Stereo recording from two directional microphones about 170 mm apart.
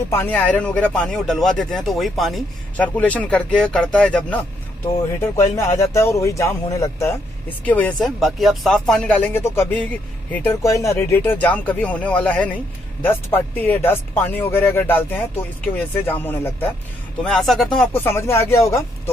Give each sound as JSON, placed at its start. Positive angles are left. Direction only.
{"t": 0.1, "sound": "speech", "side_deg": 10}
{"t": 5.3, "sound": "speech", "side_deg": 15}
{"t": 17.7, "sound": "speech", "side_deg": 10}